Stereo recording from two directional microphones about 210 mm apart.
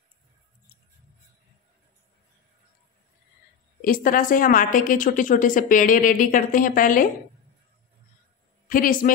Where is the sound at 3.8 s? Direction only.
40° left (ahead or behind).